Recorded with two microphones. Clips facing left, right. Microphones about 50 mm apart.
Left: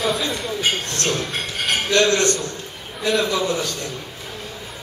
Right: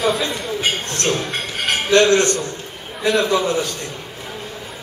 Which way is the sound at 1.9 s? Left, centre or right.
Right.